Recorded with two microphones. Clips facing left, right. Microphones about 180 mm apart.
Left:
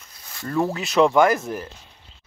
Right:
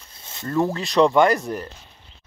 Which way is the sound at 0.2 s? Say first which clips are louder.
Even; 25° right (ahead or behind).